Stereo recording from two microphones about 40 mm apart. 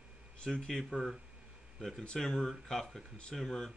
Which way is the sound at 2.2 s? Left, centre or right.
Centre.